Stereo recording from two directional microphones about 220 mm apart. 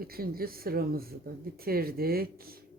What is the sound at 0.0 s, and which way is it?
A woman's voice, 45° right (ahead or behind).